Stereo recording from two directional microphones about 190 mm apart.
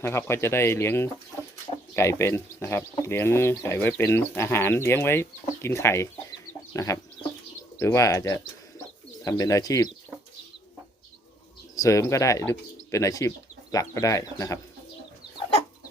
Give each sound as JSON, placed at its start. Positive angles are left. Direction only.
{"t": 0.0, "sound": "speech", "side_deg": 15}
{"t": 6.5, "sound": "chicken", "side_deg": 15}
{"t": 7.8, "sound": "speech", "side_deg": 15}
{"t": 11.7, "sound": "speech", "side_deg": 15}